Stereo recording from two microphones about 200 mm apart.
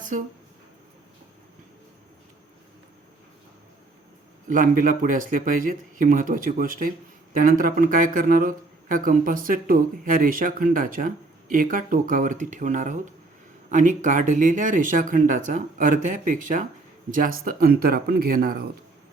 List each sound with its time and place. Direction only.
4.4 s speech: 40° right (ahead or behind)